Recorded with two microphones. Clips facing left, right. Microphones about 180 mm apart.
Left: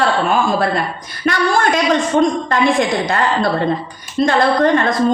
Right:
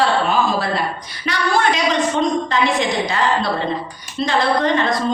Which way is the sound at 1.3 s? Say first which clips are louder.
Left 3 dB; 50° left (ahead or behind).